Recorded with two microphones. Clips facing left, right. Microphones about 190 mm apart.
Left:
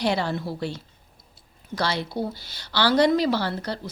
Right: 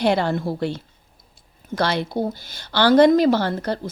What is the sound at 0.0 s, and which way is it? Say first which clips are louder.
Speech: right 5 dB; 55° right (ahead or behind).